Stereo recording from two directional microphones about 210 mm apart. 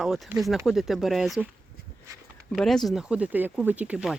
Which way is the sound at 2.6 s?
Centre (ahead or behind).